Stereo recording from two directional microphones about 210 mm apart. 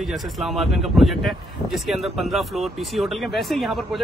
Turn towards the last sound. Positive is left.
turn(degrees=0)  # may be behind; listen again after turning